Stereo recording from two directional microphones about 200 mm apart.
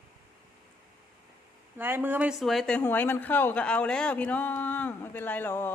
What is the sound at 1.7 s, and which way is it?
Speech, 10° right (ahead or behind).